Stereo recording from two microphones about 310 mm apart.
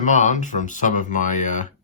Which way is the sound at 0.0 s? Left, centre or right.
Left.